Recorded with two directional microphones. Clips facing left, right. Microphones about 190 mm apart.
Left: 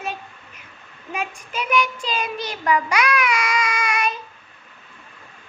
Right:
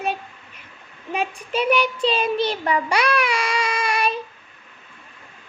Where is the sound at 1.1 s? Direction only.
30° right (ahead or behind).